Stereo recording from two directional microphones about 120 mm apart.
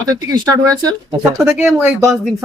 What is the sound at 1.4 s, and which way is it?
Speech, 10° right (ahead or behind).